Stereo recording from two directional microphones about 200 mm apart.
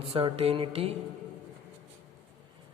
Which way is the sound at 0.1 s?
25° right (ahead or behind).